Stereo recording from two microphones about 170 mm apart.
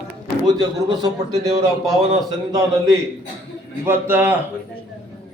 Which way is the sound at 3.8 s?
15° right (ahead or behind).